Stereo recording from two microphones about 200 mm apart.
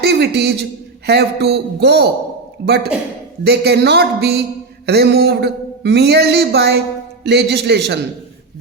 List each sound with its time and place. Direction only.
0.0 s a man's voice: 55° right (ahead or behind)